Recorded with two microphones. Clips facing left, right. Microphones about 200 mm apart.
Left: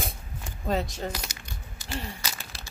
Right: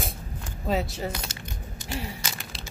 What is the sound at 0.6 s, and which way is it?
Speech, 5° right (ahead or behind).